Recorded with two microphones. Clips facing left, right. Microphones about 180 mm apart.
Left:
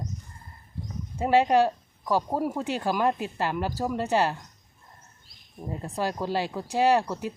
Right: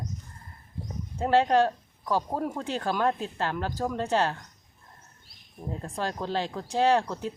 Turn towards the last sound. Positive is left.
turn(degrees=10)  # may be behind; listen again after turning